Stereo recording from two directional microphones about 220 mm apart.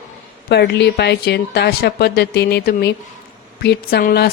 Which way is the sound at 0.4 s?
50° left (ahead or behind).